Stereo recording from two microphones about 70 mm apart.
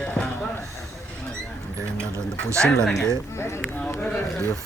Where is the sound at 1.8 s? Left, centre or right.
Right.